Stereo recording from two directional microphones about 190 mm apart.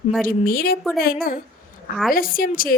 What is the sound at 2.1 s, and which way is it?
Speech, 50° left (ahead or behind).